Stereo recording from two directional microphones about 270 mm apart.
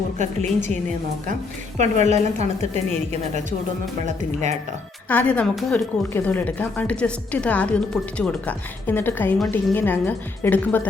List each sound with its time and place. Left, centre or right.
0.2 s a woman's voice: right
1.8 s a woman's voice: right
5.0 s speech: centre